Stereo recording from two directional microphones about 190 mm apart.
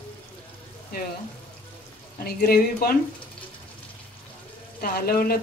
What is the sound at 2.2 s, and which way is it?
Speech, 50° left (ahead or behind).